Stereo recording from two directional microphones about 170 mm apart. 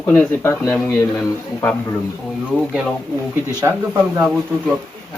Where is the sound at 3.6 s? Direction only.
15° right (ahead or behind).